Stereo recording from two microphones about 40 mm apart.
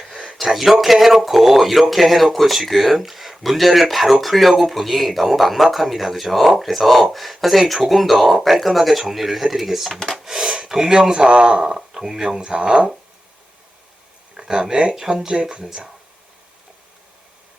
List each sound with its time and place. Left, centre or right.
0.5 s speech: centre
10.2 s a sound: centre
10.7 s speech: centre
14.3 s speech: centre